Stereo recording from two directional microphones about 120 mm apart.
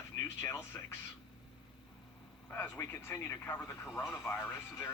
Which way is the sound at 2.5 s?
20° left (ahead or behind).